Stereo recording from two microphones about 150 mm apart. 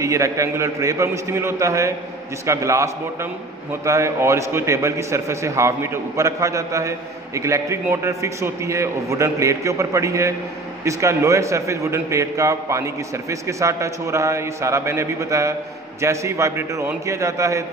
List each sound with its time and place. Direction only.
0.0 s a man's voice: 20° right (ahead or behind)